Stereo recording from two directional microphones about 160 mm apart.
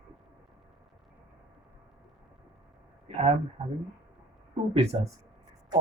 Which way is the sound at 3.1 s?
40° right (ahead or behind).